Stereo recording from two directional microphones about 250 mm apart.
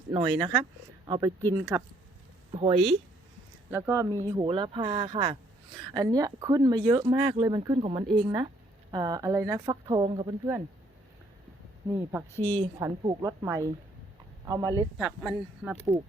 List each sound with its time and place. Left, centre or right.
0.1 s speech: centre
2.5 s speech: right
3.7 s speech: centre
11.9 s speech: centre
12.3 s a woman's voice: centre
12.8 s speech: centre
14.9 s speech: centre